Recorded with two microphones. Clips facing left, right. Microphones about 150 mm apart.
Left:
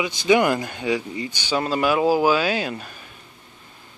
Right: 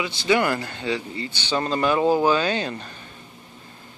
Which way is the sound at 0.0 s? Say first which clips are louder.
Left 3 dB; 15° left (ahead or behind).